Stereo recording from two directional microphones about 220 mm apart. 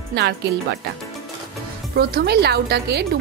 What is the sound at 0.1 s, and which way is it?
Speech, 50° right (ahead or behind).